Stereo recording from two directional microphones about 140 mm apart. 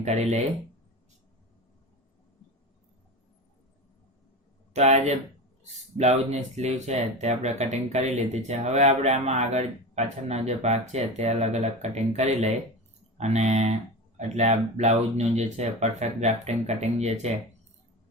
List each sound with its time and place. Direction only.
0.0 s speech: 55° right (ahead or behind)
4.7 s speech: 50° right (ahead or behind)
6.6 s speech: 55° right (ahead or behind)